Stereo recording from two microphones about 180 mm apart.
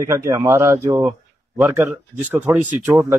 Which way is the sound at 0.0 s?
15° right (ahead or behind).